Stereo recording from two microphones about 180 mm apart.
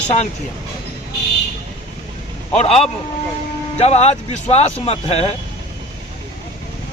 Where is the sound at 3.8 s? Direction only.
35° left (ahead or behind).